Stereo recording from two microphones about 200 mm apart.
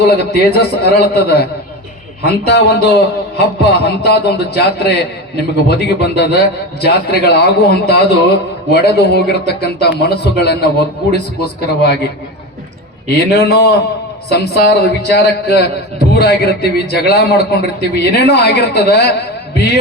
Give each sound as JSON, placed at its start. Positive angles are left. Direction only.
{"t": 0.0, "sound": "a man's voice", "side_deg": 55}
{"t": 13.1, "sound": "a man's voice", "side_deg": 55}